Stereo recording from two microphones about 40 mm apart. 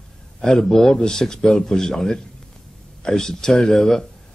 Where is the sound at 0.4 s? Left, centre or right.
Centre.